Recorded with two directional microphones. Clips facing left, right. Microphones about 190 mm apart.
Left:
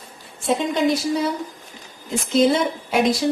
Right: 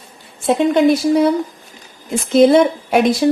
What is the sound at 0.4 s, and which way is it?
Speech, 60° right (ahead or behind).